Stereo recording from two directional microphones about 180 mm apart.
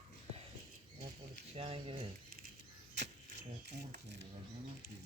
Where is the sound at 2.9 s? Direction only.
70° right (ahead or behind).